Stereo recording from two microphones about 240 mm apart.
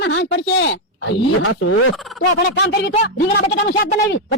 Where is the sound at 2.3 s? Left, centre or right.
Left.